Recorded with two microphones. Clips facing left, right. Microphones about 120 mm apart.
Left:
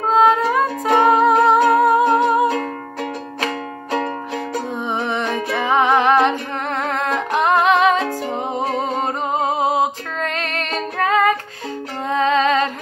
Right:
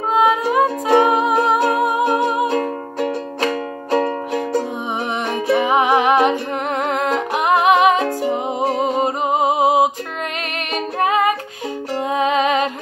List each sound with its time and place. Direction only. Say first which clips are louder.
0.1 s music: left 1 dB; 10° right (ahead or behind)